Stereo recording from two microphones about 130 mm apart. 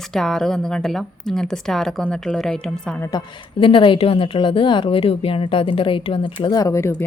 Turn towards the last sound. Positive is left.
turn(degrees=20)  # may be behind; listen again after turning